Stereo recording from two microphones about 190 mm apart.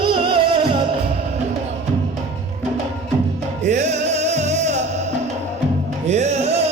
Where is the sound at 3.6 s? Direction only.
35° right (ahead or behind).